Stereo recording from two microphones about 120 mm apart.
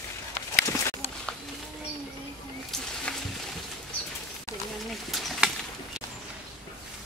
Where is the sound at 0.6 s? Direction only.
25° left (ahead or behind).